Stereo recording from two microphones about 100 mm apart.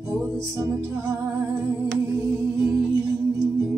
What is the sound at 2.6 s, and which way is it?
Music, 30° right (ahead or behind).